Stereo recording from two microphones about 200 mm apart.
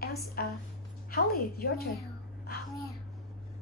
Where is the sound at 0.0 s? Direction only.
50° left (ahead or behind).